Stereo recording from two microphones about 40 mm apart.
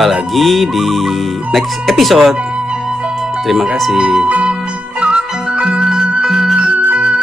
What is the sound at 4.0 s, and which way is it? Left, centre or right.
Speech, centre.